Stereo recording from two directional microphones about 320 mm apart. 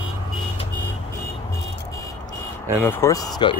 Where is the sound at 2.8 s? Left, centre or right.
Centre.